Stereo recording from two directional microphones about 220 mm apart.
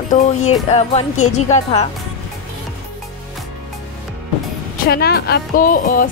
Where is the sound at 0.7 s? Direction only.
30° left (ahead or behind).